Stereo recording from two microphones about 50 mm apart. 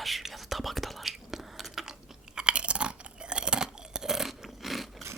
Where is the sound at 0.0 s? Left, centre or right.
Centre.